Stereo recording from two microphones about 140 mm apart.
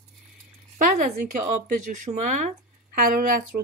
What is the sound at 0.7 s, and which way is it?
Speech, 70° right (ahead or behind).